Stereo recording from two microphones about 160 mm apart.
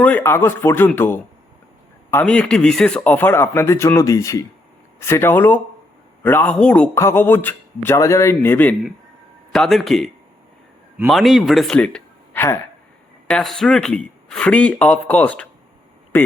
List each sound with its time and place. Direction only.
0.0 s speech: 10° left (ahead or behind)
9.5 s speech: centre (ahead or behind)
11.1 s a man's voice: centre (ahead or behind); by 16.3 s 15° left (ahead or behind)